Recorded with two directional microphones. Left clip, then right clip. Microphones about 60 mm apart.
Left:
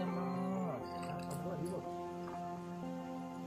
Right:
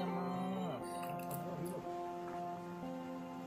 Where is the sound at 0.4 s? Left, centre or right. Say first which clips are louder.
Left 1 dB; centre.